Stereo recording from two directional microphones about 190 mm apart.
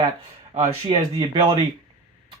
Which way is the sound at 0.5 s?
35° right (ahead or behind).